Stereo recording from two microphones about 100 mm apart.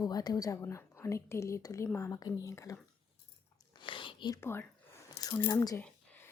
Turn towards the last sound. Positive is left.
turn(degrees=15)  # may be behind; listen again after turning